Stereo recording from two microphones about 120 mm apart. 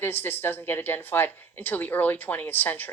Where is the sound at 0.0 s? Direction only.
20° left (ahead or behind).